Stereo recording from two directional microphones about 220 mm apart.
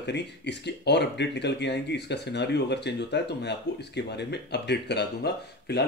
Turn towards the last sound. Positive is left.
turn(degrees=50)  # may be behind; listen again after turning